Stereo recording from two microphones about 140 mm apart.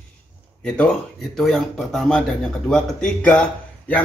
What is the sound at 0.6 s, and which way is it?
Speech, 5° left (ahead or behind).